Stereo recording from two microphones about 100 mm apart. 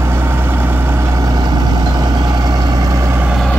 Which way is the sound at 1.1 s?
40° right (ahead or behind).